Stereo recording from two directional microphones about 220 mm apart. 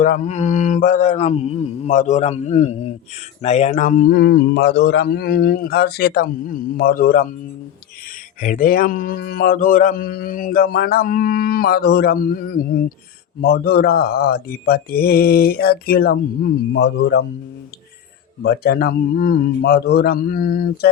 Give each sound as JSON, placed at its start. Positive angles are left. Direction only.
{"t": 0.0, "sound": "a man's voice", "side_deg": 35}
{"t": 8.4, "sound": "a man's voice", "side_deg": 35}
{"t": 18.4, "sound": "speech", "side_deg": 45}